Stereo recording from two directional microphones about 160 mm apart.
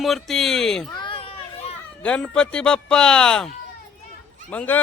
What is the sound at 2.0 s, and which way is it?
Speech, 5° left (ahead or behind).